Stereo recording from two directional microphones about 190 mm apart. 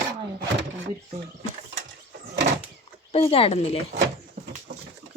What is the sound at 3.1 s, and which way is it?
Speech, 30° left (ahead or behind).